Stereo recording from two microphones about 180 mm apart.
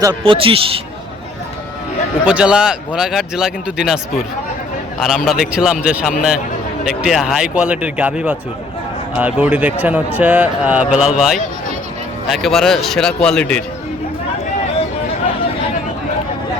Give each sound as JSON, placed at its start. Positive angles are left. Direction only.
{"t": 0.0, "sound": "a man's voice", "side_deg": -25}
{"t": 2.2, "sound": "speech", "side_deg": -5}